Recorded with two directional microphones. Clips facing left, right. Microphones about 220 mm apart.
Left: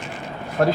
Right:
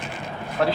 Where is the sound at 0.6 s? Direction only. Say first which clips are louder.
Left 3 dB; 45° left (ahead or behind).